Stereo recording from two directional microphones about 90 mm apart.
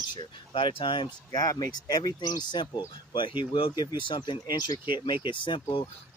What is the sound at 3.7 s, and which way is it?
Speech, 50° left (ahead or behind).